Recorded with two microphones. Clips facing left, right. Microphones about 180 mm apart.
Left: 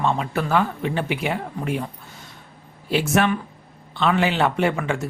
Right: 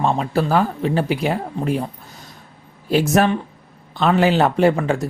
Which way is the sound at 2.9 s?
40° right (ahead or behind).